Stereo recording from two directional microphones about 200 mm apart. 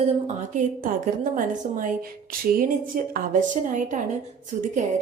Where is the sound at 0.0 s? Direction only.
35° right (ahead or behind).